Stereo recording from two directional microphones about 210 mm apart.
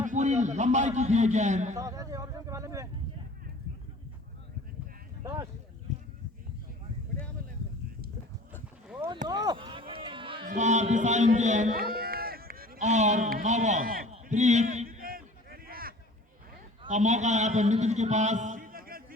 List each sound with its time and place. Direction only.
0.0 s a man's voice: 35° right (ahead or behind)
1.7 s speech: 15° right (ahead or behind)
5.2 s speech: 15° right (ahead or behind)
9.2 s a sound: 20° right (ahead or behind)
10.5 s a man's voice: 35° right (ahead or behind)
14.1 s a sound: 35° right (ahead or behind)
16.8 s a man's voice: 35° right (ahead or behind)